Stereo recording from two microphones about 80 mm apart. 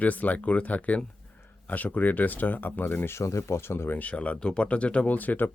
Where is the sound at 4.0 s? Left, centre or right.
Centre.